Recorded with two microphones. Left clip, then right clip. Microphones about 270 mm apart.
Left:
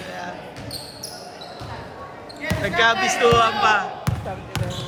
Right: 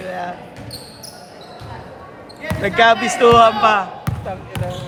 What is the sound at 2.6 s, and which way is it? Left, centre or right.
A man's voice, right.